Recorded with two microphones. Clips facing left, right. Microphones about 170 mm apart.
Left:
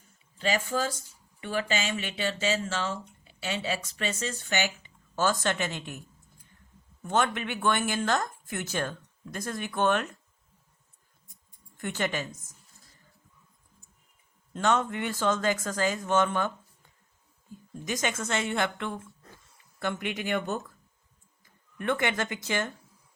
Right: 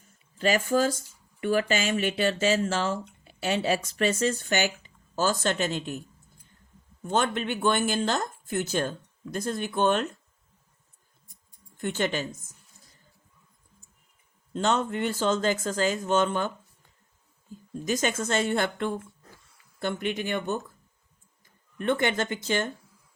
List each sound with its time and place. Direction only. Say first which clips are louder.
0.3 s speech: right 5 dB; 50° right (ahead or behind)
7.1 s speech: right 1 dB; 30° right (ahead or behind)
11.8 s speech: right 3 dB; 30° right (ahead or behind)
14.5 s speech: right 1 dB; 30° right (ahead or behind)
17.8 s speech: right 4 dB; 35° right (ahead or behind)
21.8 s speech: right 3 dB; 30° right (ahead or behind)